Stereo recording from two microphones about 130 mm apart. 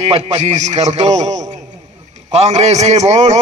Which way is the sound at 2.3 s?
60° right (ahead or behind).